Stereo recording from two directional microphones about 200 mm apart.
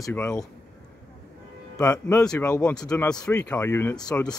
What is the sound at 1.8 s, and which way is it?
Speech, 15° left (ahead or behind).